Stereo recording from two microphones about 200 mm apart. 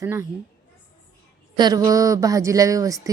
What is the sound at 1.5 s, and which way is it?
A woman's voice, 20° right (ahead or behind).